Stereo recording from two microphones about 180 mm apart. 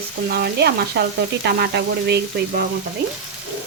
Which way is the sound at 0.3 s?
65° right (ahead or behind).